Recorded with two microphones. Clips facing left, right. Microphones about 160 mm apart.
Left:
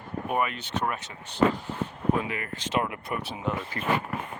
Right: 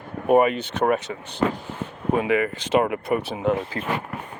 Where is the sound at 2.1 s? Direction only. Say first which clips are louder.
Right 9 dB; 75° right (ahead or behind).